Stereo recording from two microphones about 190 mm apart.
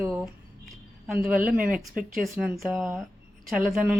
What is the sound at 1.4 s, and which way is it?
Speech, 45° right (ahead or behind).